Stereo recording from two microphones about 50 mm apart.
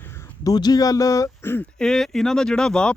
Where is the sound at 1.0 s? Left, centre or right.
Left.